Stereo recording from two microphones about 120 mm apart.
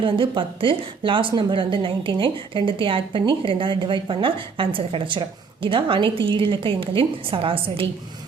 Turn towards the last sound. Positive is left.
turn(degrees=-50)  # may be behind; listen again after turning